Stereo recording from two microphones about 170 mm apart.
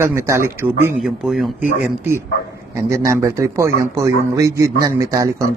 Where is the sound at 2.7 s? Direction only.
15° right (ahead or behind).